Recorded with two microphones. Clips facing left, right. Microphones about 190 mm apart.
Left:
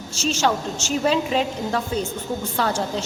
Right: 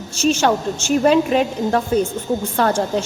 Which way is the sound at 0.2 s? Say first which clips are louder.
Right 5 dB; 55° right (ahead or behind).